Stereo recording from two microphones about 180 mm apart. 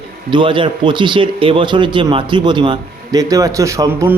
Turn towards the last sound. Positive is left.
turn(degrees=-15)  # may be behind; listen again after turning